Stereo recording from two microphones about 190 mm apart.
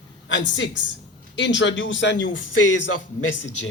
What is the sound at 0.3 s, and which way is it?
A man's voice, 75° left (ahead or behind).